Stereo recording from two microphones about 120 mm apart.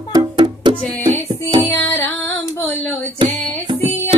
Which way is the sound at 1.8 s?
15° left (ahead or behind).